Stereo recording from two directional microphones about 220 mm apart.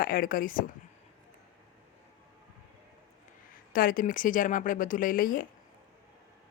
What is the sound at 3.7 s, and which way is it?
Speech, 40° left (ahead or behind).